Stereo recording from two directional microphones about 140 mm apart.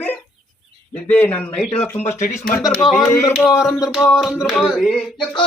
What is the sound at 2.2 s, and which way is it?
Speech, 60° left (ahead or behind).